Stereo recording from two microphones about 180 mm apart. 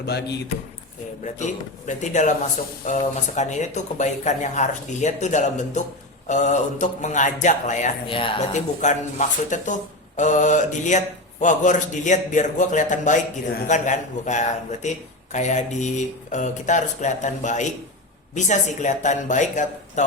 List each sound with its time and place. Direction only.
0.0 s speech: 65° left (ahead or behind)
1.2 s speech: 40° left (ahead or behind)
3.3 s speech: 40° left (ahead or behind)
8.0 s speech: 30° left (ahead or behind)
8.5 s speech: 40° left (ahead or behind)